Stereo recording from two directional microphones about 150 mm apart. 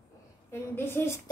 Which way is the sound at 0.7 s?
15° left (ahead or behind).